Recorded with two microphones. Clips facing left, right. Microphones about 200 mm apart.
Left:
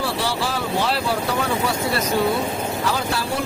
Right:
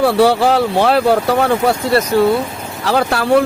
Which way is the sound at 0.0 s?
60° right (ahead or behind).